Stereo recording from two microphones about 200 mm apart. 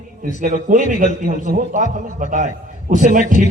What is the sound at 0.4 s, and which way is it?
A man's voice, 40° right (ahead or behind).